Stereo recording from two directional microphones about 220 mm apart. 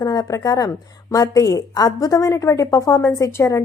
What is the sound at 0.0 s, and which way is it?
A woman's voice, 15° left (ahead or behind).